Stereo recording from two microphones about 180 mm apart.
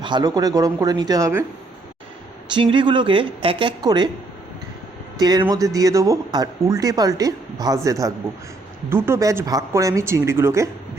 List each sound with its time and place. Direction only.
0.0 s speech: 25° right (ahead or behind)
2.5 s speech: 25° right (ahead or behind)
5.2 s speech: 20° right (ahead or behind)